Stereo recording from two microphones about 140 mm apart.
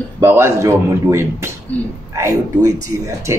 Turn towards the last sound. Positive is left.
turn(degrees=-25)  # may be behind; listen again after turning